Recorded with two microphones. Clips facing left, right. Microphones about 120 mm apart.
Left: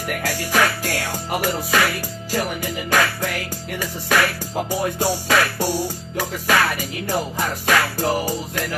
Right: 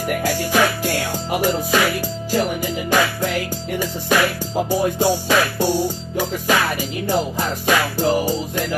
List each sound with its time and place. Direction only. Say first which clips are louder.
0.2 s music: right 1 dB; 15° right (ahead or behind)